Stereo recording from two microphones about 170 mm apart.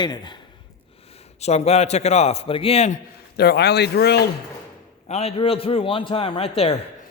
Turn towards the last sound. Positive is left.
turn(degrees=35)  # may be behind; listen again after turning